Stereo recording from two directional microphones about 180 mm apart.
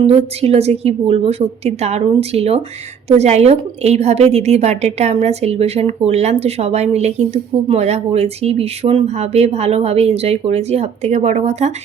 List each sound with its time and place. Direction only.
0.0 s speech: 35° right (ahead or behind)